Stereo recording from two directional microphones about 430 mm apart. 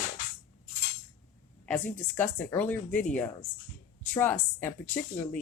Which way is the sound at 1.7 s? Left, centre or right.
Centre.